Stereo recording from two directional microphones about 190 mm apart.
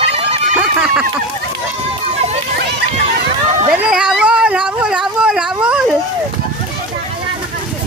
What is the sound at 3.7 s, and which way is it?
Cat, 5° right (ahead or behind).